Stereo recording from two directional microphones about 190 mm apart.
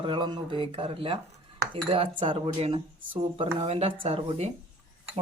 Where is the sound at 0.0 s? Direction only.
25° right (ahead or behind).